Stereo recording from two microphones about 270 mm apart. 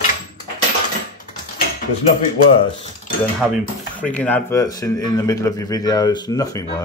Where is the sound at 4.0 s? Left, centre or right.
Centre.